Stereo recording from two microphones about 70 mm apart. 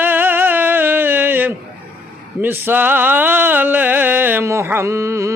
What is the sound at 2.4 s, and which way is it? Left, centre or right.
Music, right.